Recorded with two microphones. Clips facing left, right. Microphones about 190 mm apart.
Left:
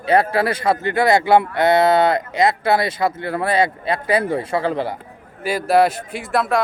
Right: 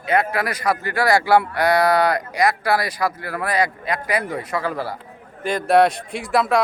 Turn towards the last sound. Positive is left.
turn(degrees=0)  # may be behind; listen again after turning